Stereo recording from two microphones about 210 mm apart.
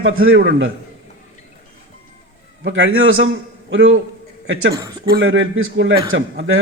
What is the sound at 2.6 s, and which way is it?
A man's voice, 65° right (ahead or behind).